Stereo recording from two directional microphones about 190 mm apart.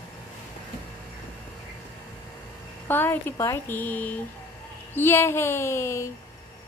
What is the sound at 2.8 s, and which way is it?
Speech, 10° left (ahead or behind).